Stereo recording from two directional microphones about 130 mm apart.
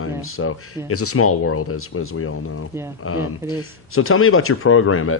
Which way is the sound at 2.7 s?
20° right (ahead or behind).